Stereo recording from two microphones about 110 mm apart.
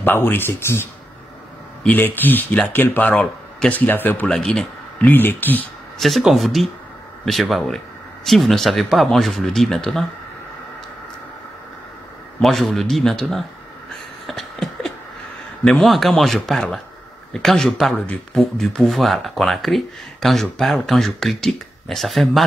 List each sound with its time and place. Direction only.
0.0 s speech: 20° left (ahead or behind)
5.9 s speech: centre (ahead or behind)
12.4 s speech: 5° left (ahead or behind)
14.2 s a sound: centre (ahead or behind)
15.6 s speech: centre (ahead or behind)